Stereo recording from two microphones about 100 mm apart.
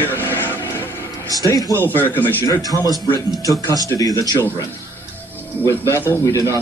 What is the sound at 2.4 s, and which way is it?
Speech, 35° left (ahead or behind).